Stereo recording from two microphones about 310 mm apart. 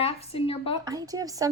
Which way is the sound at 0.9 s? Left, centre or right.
Centre.